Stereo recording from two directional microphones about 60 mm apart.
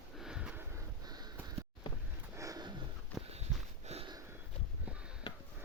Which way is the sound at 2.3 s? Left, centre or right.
Right.